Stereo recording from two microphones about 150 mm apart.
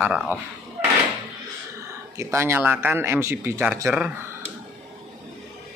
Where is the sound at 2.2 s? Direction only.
15° right (ahead or behind).